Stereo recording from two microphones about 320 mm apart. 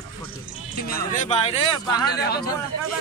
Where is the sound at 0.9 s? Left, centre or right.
Left.